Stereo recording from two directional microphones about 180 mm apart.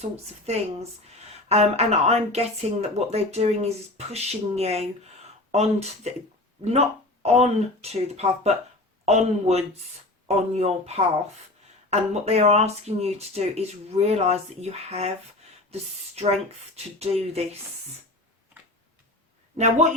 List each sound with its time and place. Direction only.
0.0 s speech: 35° right (ahead or behind)
16.7 s speech: 35° right (ahead or behind)
19.5 s speech: 40° right (ahead or behind)